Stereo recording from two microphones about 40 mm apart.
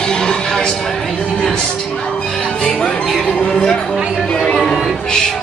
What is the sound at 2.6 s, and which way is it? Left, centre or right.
Music, centre.